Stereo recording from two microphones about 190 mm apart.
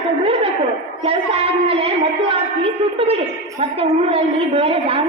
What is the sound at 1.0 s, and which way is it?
A woman's voice, 30° right (ahead or behind).